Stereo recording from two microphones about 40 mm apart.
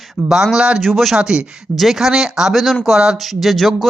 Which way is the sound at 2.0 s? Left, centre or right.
Centre.